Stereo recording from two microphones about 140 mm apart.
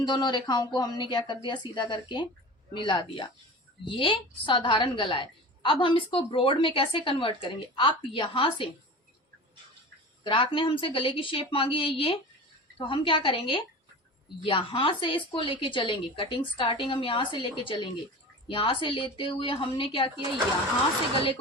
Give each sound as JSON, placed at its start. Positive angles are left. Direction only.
{"t": 0.0, "sound": "a woman's voice", "side_deg": 30}
{"t": 10.2, "sound": "a woman's voice", "side_deg": 35}